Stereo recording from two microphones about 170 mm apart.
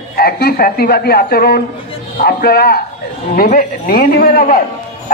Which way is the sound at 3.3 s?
55° left (ahead or behind).